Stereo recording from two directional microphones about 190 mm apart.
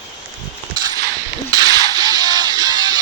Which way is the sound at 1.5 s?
20° right (ahead or behind).